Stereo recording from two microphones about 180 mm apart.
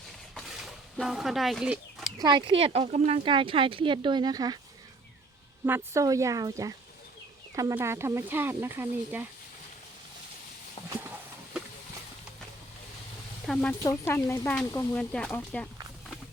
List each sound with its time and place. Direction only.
0.3 s a sound: centre (ahead or behind)
2.1 s speech: 25° right (ahead or behind)
5.6 s speech: 15° right (ahead or behind)
13.5 s speech: 5° left (ahead or behind)
15.1 s speech: 5° left (ahead or behind)